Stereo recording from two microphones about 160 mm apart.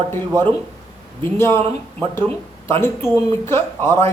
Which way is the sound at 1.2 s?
15° left (ahead or behind).